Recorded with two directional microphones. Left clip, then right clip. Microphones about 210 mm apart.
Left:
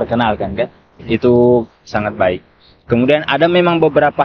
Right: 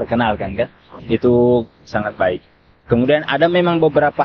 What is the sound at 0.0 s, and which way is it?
Speech, 25° left (ahead or behind).